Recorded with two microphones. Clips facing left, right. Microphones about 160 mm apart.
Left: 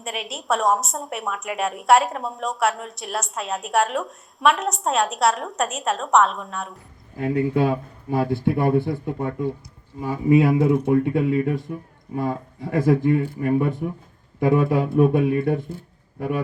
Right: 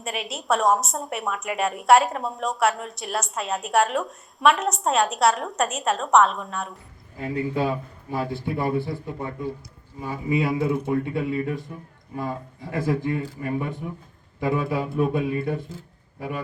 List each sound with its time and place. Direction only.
0.0 s a woman's voice: centre (ahead or behind)
7.2 s speech: 55° left (ahead or behind)